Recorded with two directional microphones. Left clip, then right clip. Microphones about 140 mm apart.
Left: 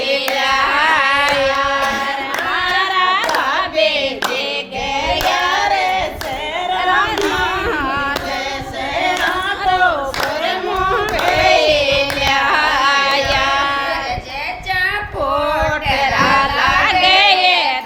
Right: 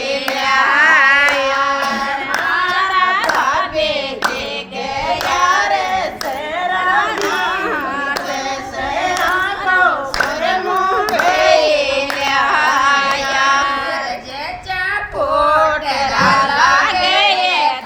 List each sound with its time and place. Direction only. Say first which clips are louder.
0.3 s carnatic music: right 4 dB; 15° left (ahead or behind)
2.6 s child singing: left 2 dB; 35° left (ahead or behind)
5.5 s child singing: right 1 dB; 25° left (ahead or behind)
11.1 s crowd: right 2 dB; 20° left (ahead or behind)
12.5 s carnatic music: right 1 dB; 50° left (ahead or behind)
16.0 s a sound: even; 45° left (ahead or behind)